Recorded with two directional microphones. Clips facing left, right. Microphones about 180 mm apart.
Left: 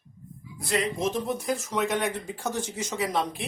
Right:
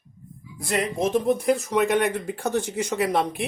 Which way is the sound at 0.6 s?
55° right (ahead or behind).